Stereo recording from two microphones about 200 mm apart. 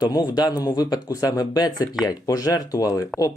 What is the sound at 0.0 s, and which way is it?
Speech, 20° left (ahead or behind).